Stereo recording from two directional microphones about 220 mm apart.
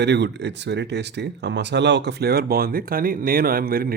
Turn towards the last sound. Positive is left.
turn(degrees=-40)  # may be behind; listen again after turning